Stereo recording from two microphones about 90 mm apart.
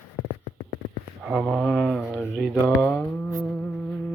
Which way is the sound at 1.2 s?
10° right (ahead or behind).